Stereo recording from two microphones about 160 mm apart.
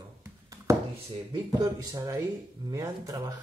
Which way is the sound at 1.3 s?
25° right (ahead or behind).